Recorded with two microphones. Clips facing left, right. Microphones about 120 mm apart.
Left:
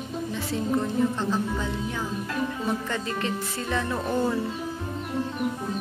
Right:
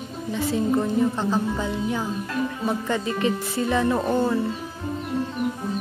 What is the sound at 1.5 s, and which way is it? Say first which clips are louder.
Speech: right 4 dB; 20° right (ahead or behind).